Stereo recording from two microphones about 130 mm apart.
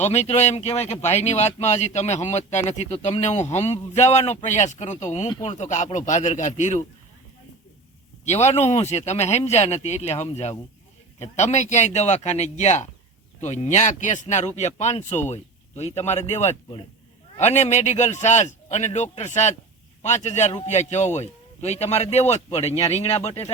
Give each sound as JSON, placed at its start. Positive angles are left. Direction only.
{"t": 0.0, "sound": "speech", "side_deg": 60}
{"t": 8.2, "sound": "speech", "side_deg": 60}
{"t": 11.2, "sound": "speech", "side_deg": 60}